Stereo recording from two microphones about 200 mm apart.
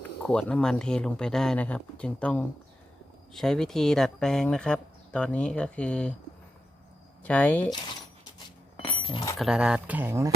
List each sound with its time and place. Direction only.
0.3 s speech: 5° left (ahead or behind)
7.3 s speech: 5° left (ahead or behind)
7.7 s speech: 20° left (ahead or behind)
8.7 s chink: 25° left (ahead or behind)
9.4 s speech: 5° right (ahead or behind)